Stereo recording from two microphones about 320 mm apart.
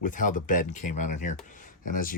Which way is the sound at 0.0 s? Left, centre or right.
Left.